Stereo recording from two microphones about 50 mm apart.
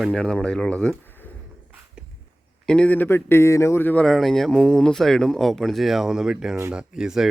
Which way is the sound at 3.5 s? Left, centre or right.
Left.